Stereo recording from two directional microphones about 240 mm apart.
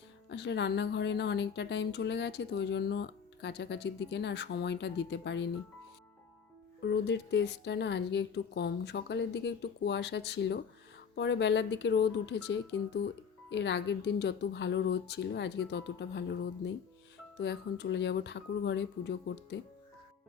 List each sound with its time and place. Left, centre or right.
0.3 s a woman's voice: left
6.8 s a woman's voice: left
17.4 s a woman's voice: left